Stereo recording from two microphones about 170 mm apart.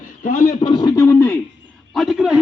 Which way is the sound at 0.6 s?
25° left (ahead or behind).